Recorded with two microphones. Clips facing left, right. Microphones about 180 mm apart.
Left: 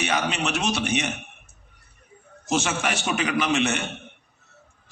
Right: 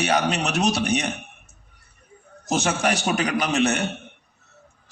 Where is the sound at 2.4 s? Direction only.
35° right (ahead or behind).